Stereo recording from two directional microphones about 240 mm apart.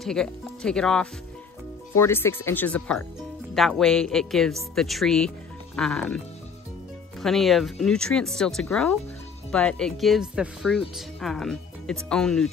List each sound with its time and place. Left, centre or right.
0.0 s speech: centre